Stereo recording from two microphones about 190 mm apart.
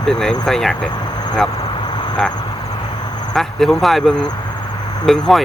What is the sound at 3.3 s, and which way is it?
Speech, centre (ahead or behind).